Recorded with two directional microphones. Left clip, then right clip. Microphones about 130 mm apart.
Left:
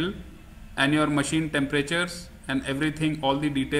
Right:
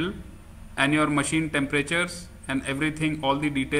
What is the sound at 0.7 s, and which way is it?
A man's voice, 5° left (ahead or behind).